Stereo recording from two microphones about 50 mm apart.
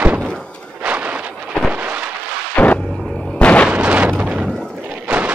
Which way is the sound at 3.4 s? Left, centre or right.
Left.